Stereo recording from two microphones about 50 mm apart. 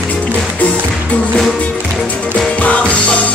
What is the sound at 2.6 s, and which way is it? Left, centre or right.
Music, left.